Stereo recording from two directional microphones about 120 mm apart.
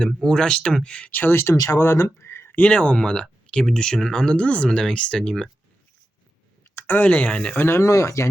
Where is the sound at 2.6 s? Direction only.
10° left (ahead or behind).